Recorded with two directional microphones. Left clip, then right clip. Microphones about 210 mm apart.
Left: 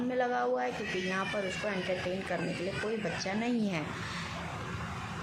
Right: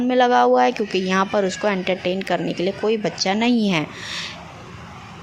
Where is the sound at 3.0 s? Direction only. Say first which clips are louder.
Right 13 dB; 40° right (ahead or behind).